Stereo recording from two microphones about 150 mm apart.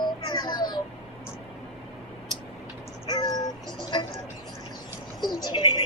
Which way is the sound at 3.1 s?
30° left (ahead or behind).